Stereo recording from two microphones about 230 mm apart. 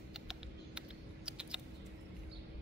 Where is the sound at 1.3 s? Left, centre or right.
Centre.